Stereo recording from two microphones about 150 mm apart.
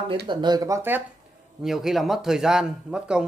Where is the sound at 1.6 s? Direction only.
Centre (ahead or behind).